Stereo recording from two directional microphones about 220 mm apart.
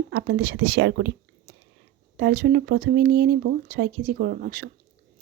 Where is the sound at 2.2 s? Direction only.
50° right (ahead or behind).